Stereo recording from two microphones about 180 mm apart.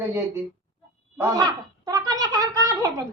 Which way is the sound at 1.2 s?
20° right (ahead or behind).